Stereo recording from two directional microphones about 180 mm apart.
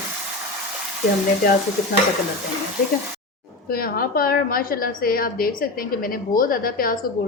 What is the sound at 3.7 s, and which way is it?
A woman's voice, 55° left (ahead or behind).